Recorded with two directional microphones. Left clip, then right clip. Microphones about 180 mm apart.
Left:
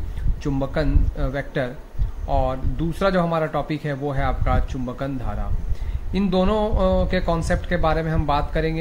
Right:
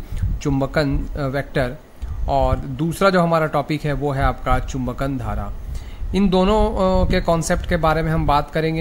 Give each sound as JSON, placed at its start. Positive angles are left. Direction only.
{"t": 0.4, "sound": "speech", "side_deg": -45}